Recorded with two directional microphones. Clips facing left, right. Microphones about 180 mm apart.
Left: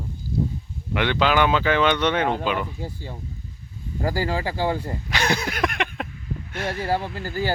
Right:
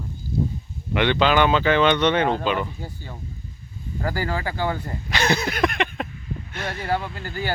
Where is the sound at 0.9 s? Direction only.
5° left (ahead or behind).